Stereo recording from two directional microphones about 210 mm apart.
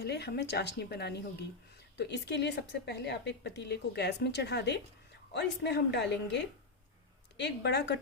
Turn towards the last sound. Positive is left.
turn(degrees=55)  # may be behind; listen again after turning